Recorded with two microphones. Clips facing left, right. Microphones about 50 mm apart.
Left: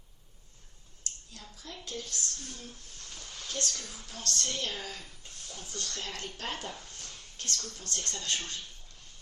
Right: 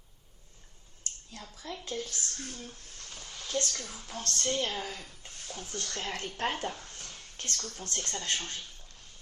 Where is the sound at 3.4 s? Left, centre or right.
Right.